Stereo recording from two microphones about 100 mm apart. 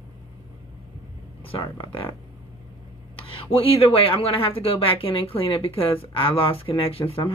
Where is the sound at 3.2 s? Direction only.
70° left (ahead or behind).